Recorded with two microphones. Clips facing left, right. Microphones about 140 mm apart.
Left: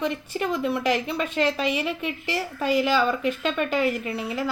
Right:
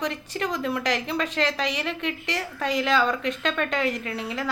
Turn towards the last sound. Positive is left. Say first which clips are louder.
# left 2 dB
turn(degrees=0)  # may be behind; listen again after turning